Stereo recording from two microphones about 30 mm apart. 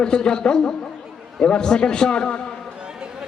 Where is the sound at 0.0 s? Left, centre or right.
Left.